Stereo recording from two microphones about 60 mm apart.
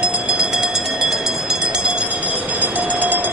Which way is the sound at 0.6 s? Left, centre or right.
Centre.